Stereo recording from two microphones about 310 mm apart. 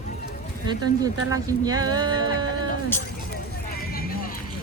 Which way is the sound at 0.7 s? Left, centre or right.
Centre.